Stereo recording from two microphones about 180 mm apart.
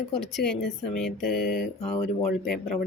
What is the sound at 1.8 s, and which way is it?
Speech, 35° left (ahead or behind).